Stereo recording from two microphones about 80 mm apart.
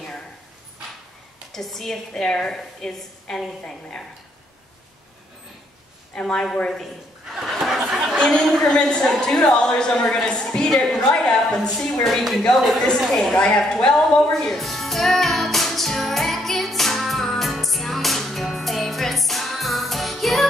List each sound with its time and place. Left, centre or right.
1.5 s a woman's voice: centre
6.1 s a woman's voice: centre
7.3 s a sound: centre
8.2 s a woman's voice: centre
14.3 s music: centre